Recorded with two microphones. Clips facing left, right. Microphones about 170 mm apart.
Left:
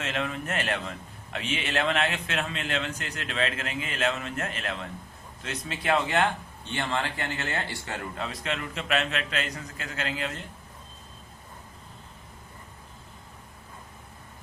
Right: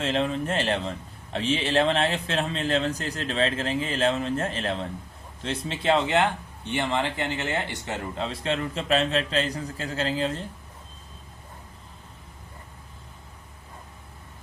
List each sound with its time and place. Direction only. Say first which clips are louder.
0.0 s a man's voice: right 6 dB; 30° right (ahead or behind)